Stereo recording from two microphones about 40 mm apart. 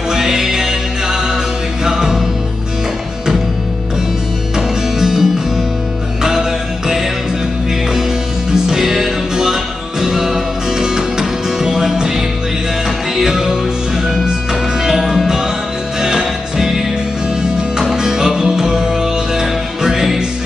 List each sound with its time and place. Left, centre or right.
0.1 s music: centre
4.6 s music: centre
8.6 s music: centre
13.1 s music: centre
14.8 s music: centre
17.9 s music: centre